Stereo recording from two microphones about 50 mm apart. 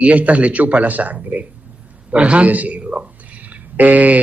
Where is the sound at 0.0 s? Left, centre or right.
Right.